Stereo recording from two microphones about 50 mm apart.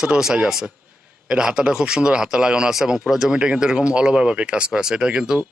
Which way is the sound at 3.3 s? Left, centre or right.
Centre.